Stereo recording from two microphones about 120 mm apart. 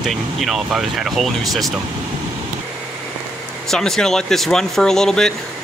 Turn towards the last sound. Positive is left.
turn(degrees=5)  # may be behind; listen again after turning